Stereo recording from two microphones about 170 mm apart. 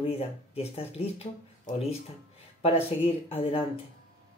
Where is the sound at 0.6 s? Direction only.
35° left (ahead or behind).